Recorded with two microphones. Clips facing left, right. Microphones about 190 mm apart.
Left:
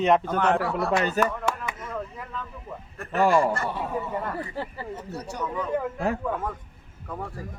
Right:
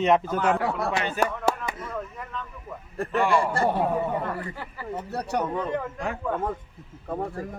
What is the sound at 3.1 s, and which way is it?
Speech, 40° left (ahead or behind).